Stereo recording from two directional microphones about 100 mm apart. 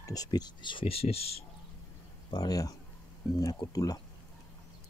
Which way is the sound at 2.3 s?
40° left (ahead or behind).